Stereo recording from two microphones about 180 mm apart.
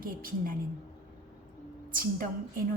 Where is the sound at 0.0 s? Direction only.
50° right (ahead or behind).